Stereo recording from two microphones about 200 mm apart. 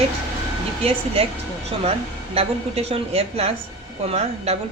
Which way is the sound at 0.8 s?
30° right (ahead or behind).